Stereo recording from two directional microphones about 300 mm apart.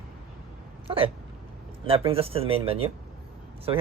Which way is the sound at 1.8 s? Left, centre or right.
Centre.